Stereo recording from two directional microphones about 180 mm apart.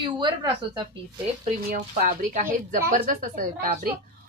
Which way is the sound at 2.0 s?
50° right (ahead or behind).